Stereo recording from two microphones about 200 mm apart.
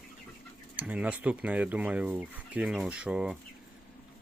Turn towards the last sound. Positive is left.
turn(degrees=-5)  # may be behind; listen again after turning